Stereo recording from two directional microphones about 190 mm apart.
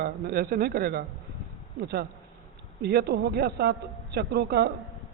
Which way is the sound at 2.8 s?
55° right (ahead or behind).